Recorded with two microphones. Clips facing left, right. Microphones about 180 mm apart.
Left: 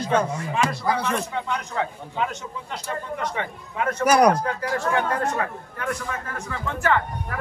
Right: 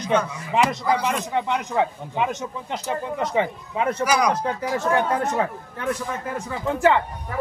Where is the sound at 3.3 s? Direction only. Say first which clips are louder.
Right 6 dB; 20° right (ahead or behind).